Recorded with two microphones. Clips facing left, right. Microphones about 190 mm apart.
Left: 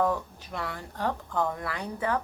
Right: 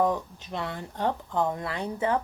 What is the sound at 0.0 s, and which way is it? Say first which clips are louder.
Speech: right 2 dB; 20° right (ahead or behind).